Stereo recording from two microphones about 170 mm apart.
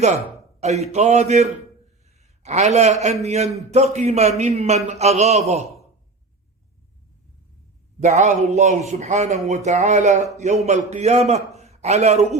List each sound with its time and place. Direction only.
0.6 s a man's voice: 40° right (ahead or behind)
7.9 s a man's voice: 45° right (ahead or behind)